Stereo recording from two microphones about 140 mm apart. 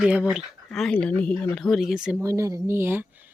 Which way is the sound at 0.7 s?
5° left (ahead or behind).